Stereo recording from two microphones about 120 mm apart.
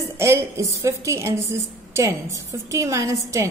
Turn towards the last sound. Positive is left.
turn(degrees=-25)  # may be behind; listen again after turning